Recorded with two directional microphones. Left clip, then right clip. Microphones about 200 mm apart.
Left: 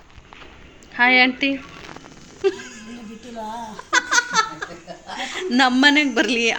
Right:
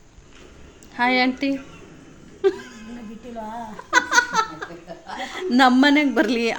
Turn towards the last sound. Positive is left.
turn(degrees=-10)  # may be behind; listen again after turning